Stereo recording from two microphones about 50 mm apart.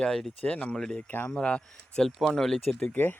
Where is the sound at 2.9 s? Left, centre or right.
Left.